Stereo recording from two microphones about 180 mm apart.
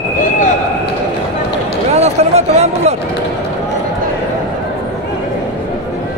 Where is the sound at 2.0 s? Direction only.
35° right (ahead or behind).